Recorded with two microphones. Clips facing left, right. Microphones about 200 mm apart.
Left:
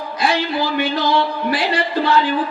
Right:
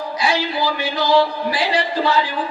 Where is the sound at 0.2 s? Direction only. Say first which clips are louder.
Left 2 dB; 55° left (ahead or behind).